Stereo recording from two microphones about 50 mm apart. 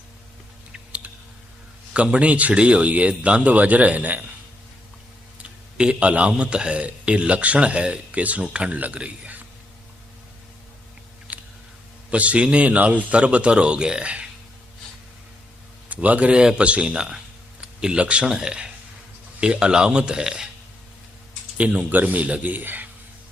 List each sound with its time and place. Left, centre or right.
1.9 s a man's voice: right
5.4 s a man's voice: centre
11.3 s chewing: right
12.1 s a man's voice: right
15.9 s a man's voice: right; by 20.5 s centre
21.6 s a man's voice: right